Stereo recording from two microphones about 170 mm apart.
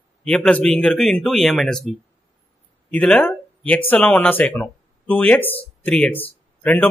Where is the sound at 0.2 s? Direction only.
5° left (ahead or behind).